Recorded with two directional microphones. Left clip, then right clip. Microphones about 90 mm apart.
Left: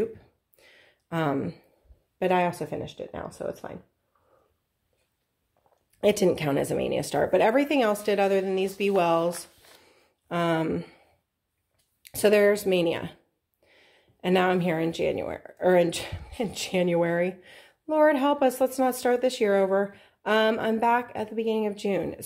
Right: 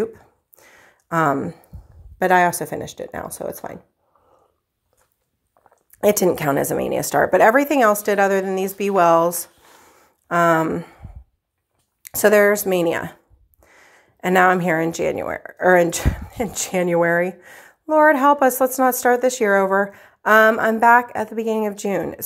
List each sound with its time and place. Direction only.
0.0 s a sound: 25° right (ahead or behind)
2.1 s a woman's voice: 30° right (ahead or behind)
3.0 s speech: 50° right (ahead or behind)
5.9 s a woman's voice: 25° right (ahead or behind)
9.8 s a sound: 20° right (ahead or behind)
12.1 s speech: 25° right (ahead or behind)
16.3 s a woman's voice: 15° right (ahead or behind)